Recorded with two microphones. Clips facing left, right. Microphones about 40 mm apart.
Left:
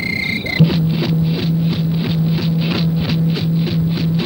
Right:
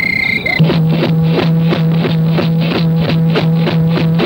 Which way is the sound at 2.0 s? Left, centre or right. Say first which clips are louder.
Right 5 dB; right.